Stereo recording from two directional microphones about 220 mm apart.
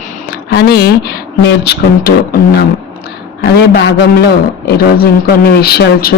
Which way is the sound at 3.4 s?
50° left (ahead or behind).